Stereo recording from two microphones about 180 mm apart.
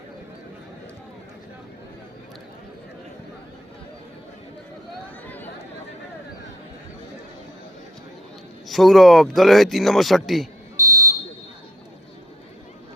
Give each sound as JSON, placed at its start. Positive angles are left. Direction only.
{"t": 8.6, "sound": "speech", "side_deg": 0}
{"t": 10.8, "sound": "smoke detector", "side_deg": -15}